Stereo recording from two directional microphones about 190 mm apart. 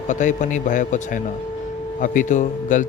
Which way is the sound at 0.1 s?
40° left (ahead or behind).